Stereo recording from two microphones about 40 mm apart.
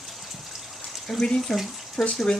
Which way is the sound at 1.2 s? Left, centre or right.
Centre.